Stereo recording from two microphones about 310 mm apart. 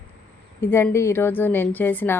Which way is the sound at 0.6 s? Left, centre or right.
Centre.